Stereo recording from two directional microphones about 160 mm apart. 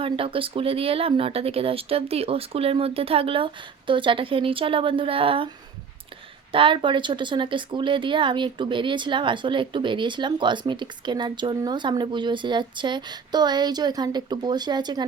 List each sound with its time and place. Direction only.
0.0 s speech: 35° right (ahead or behind)
6.5 s speech: 30° right (ahead or behind)